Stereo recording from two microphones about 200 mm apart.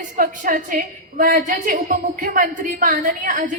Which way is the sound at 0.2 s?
45° right (ahead or behind).